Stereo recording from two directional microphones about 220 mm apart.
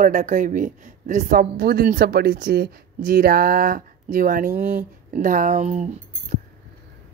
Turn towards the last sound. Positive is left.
turn(degrees=-35)  # may be behind; listen again after turning